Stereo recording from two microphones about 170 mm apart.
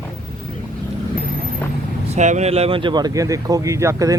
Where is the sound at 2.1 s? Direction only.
45° right (ahead or behind).